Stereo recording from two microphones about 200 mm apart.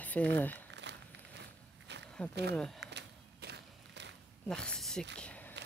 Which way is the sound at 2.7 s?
60° right (ahead or behind).